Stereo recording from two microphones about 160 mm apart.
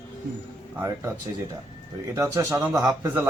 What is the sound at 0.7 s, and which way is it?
Speech, 20° right (ahead or behind).